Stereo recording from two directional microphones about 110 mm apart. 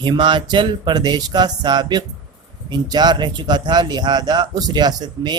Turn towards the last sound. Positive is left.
turn(degrees=-40)  # may be behind; listen again after turning